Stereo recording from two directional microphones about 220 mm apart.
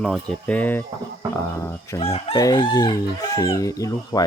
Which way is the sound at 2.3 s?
15° left (ahead or behind).